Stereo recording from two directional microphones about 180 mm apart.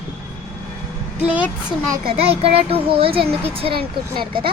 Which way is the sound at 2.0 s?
35° right (ahead or behind).